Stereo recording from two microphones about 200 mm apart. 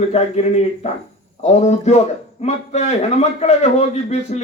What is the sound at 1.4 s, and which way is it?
Speech, 35° left (ahead or behind).